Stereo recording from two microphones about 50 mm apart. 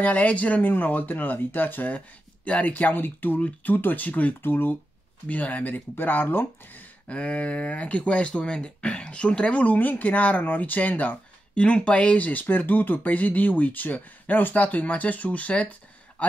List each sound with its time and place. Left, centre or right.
0.0 s speech: left
4.4 s speech: left
5.3 s speech: left
7.1 s speech: left
9.6 s speech: left
11.5 s a man's voice: left